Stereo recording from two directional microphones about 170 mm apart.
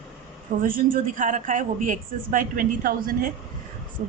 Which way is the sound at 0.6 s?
55° right (ahead or behind).